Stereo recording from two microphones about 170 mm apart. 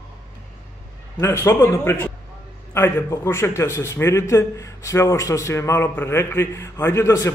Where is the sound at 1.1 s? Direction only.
15° left (ahead or behind).